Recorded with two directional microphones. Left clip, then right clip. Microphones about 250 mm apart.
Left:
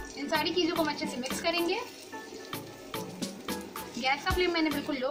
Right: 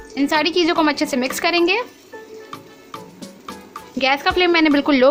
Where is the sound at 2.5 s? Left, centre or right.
Centre.